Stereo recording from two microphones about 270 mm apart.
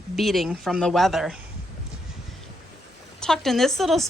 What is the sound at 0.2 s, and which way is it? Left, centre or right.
A woman's voice, centre.